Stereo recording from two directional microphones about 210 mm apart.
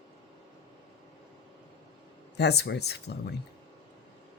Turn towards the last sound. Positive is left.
turn(degrees=50)  # may be behind; listen again after turning